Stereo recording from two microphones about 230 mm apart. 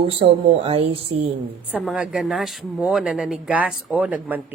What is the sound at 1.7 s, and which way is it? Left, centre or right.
Speech, centre.